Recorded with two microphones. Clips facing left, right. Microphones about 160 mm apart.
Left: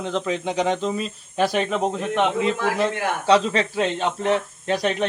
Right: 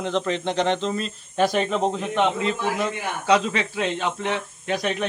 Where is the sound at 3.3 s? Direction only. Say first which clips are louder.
Left 2 dB; 35° left (ahead or behind).